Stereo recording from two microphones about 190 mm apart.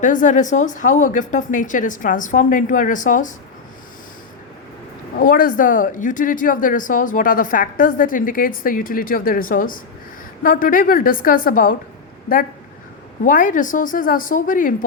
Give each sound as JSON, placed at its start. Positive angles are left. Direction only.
{"t": 0.0, "sound": "speech", "side_deg": 45}
{"t": 5.1, "sound": "speech", "side_deg": 45}
{"t": 13.2, "sound": "speech", "side_deg": 45}